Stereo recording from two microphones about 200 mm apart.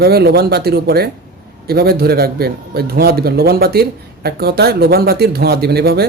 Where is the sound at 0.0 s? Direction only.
55° right (ahead or behind).